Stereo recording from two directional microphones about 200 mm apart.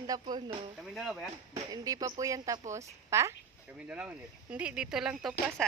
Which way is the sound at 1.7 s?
15° right (ahead or behind).